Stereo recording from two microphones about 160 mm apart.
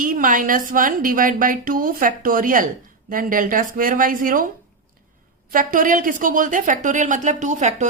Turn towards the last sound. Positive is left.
turn(degrees=-50)  # may be behind; listen again after turning